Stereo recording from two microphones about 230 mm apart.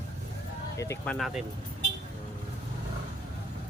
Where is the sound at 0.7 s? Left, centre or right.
Centre.